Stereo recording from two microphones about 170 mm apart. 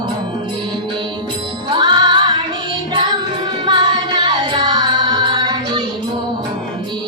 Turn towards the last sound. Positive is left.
turn(degrees=-25)  # may be behind; listen again after turning